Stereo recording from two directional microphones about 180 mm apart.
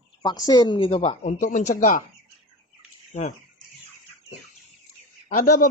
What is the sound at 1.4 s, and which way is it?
Speech, 45° left (ahead or behind).